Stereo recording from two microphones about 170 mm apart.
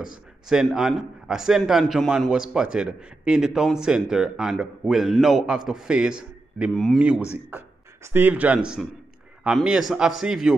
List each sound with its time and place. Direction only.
0.5 s a man's voice: 5° right (ahead or behind)